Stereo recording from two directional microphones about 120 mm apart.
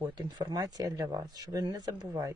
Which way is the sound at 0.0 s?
35° right (ahead or behind).